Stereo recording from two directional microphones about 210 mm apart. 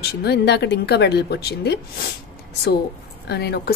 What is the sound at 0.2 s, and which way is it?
A woman's voice, 50° left (ahead or behind).